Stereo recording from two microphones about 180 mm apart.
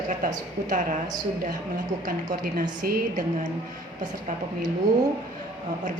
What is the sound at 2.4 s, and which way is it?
Speech, 55° right (ahead or behind).